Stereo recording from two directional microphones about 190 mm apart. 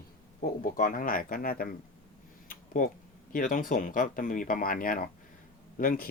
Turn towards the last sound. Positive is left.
turn(degrees=45)  # may be behind; listen again after turning